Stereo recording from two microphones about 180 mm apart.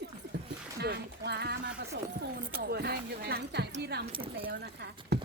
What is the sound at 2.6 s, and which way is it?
Speech, 60° right (ahead or behind).